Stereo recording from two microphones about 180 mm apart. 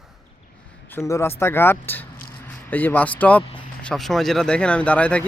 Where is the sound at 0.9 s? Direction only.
15° left (ahead or behind).